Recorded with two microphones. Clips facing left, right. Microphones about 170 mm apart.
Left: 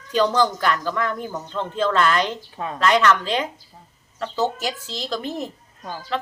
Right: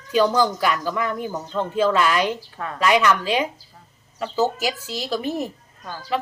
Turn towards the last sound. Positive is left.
turn(degrees=-10)  # may be behind; listen again after turning